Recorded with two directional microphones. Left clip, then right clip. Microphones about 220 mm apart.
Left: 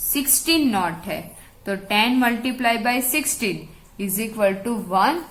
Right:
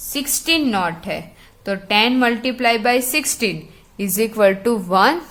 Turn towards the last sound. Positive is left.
turn(degrees=-45)  # may be behind; listen again after turning